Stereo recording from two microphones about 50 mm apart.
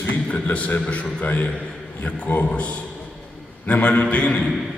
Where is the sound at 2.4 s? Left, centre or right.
Left.